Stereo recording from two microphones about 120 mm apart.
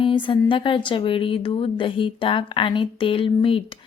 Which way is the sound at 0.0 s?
45° left (ahead or behind).